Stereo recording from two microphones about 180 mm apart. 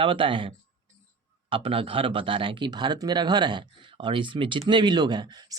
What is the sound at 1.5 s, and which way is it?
Speech, 30° right (ahead or behind).